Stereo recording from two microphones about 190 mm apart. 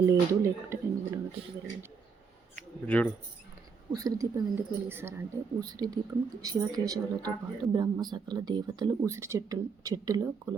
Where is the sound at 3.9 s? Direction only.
20° right (ahead or behind).